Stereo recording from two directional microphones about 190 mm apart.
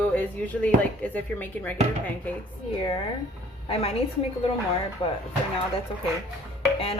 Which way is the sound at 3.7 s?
30° left (ahead or behind).